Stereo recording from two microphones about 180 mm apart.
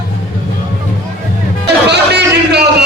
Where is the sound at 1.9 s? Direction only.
65° right (ahead or behind).